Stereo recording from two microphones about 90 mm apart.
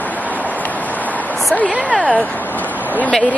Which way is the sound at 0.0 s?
20° left (ahead or behind).